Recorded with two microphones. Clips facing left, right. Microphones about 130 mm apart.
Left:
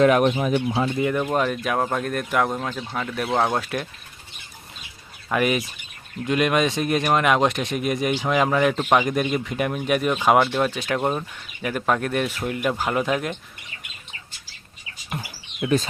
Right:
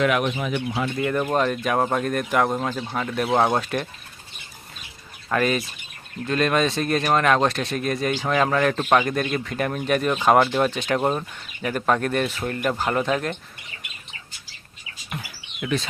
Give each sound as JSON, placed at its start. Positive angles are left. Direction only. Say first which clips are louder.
{"t": 0.0, "sound": "speech", "louder": "left 5 dB", "side_deg": 40}
{"t": 0.9, "sound": "speech", "louder": "right 3 dB", "side_deg": 5}
{"t": 5.3, "sound": "speech", "louder": "even", "side_deg": 10}